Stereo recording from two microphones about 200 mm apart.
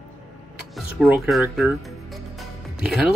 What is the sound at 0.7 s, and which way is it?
Speech, 5° right (ahead or behind).